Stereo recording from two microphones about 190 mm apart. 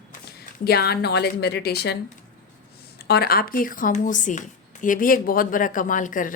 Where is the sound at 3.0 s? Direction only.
55° left (ahead or behind).